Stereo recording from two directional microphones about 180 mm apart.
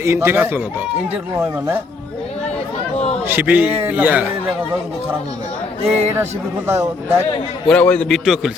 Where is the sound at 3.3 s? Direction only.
10° right (ahead or behind).